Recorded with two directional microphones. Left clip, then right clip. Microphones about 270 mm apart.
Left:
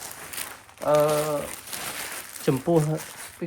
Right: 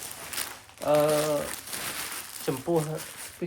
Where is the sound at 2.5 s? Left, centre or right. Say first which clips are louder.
Left 6 dB; left.